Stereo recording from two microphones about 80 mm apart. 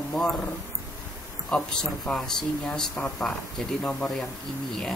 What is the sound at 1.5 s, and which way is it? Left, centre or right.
Speech, centre.